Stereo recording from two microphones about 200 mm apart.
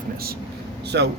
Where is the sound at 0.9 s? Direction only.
60° right (ahead or behind).